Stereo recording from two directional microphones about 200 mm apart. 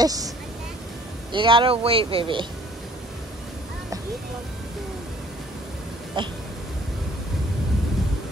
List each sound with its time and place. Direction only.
0.0 s speech: 20° right (ahead or behind)
1.3 s speech: 25° right (ahead or behind)
6.2 s speech: 25° right (ahead or behind)